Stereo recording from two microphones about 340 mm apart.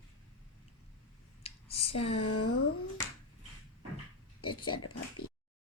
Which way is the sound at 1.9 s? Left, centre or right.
Left.